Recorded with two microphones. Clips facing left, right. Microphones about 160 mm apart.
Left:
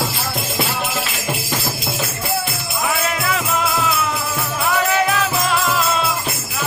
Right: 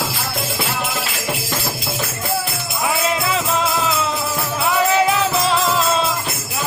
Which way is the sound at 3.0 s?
25° right (ahead or behind).